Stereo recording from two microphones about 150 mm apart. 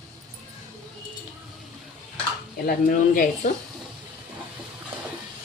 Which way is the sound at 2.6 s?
65° left (ahead or behind).